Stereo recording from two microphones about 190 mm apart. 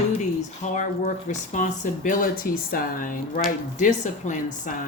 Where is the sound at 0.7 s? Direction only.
40° left (ahead or behind).